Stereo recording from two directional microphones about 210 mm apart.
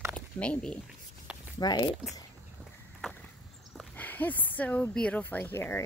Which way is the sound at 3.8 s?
10° left (ahead or behind).